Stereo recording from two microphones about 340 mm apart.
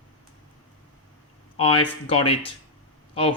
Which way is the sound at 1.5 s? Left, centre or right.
Centre.